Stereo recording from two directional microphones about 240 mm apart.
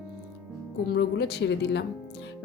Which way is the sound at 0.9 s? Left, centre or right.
Left.